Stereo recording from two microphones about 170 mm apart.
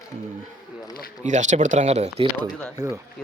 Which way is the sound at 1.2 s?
45° right (ahead or behind).